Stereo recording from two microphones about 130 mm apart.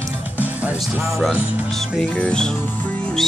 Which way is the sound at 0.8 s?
Centre (ahead or behind).